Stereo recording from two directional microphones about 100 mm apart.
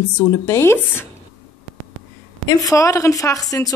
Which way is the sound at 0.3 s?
25° left (ahead or behind).